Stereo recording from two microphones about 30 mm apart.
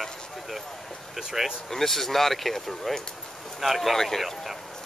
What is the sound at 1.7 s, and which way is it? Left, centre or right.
Speech, centre.